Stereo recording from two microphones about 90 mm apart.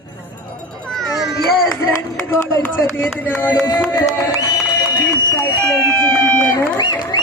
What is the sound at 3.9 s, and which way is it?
Music, 45° left (ahead or behind).